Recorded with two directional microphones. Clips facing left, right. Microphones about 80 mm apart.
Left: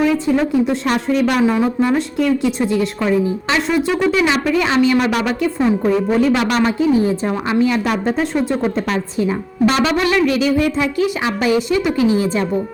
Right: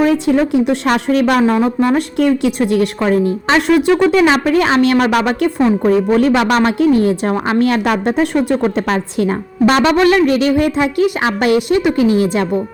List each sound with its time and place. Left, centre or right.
0.5 s a woman's voice: right
2.0 s a woman's voice: right
3.0 s speech: right
3.7 s a woman's voice: right
4.2 s a woman's voice: right